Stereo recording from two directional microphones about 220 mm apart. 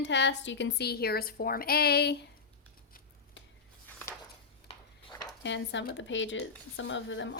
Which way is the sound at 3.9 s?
10° left (ahead or behind).